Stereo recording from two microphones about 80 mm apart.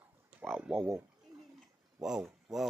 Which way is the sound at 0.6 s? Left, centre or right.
Centre.